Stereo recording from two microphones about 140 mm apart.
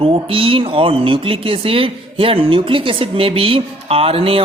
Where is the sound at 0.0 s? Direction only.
40° right (ahead or behind).